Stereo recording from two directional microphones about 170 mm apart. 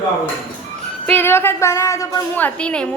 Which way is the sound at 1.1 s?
15° left (ahead or behind).